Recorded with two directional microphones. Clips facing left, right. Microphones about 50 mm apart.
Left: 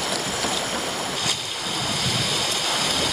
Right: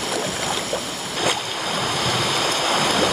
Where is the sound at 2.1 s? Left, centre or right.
Right.